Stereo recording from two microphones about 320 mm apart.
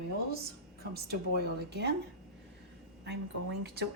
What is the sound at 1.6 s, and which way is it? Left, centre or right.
Speech, right.